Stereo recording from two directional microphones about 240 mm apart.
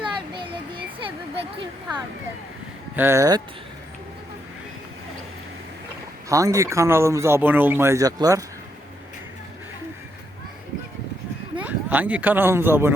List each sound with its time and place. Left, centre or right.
0.0 s a sound: right
2.9 s speech: centre
6.2 s speech: centre
11.5 s speech: centre